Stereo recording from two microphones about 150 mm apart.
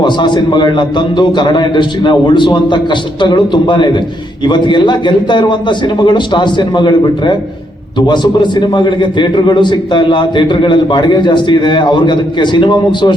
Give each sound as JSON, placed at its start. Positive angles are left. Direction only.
{"t": 0.0, "sound": "a man's voice", "side_deg": 30}